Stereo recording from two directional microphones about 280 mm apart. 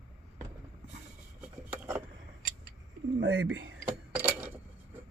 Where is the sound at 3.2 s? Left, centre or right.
Right.